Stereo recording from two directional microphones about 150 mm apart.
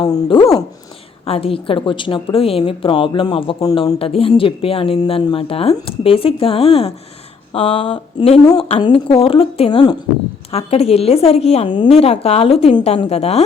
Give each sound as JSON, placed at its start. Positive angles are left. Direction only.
{"t": 0.0, "sound": "a woman's voice", "side_deg": 35}